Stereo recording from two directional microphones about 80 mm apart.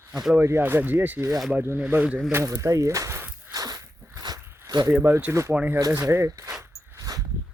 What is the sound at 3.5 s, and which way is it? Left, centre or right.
Walk, right.